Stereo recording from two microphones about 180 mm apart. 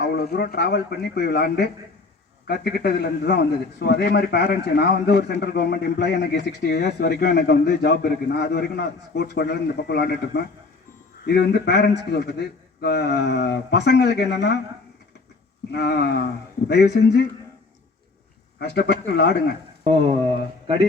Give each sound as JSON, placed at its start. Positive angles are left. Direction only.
{"t": 0.0, "sound": "a man's voice", "side_deg": 60}
{"t": 15.7, "sound": "a man's voice", "side_deg": 65}
{"t": 18.6, "sound": "a man's voice", "side_deg": 65}
{"t": 19.8, "sound": "speech", "side_deg": -30}